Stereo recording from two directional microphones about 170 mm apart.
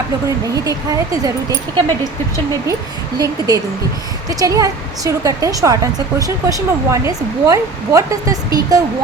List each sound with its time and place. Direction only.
0.3 s a woman's voice: 20° right (ahead or behind)
3.2 s a woman's voice: 20° right (ahead or behind)